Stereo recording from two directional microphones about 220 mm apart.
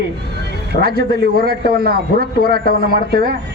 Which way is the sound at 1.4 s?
45° right (ahead or behind).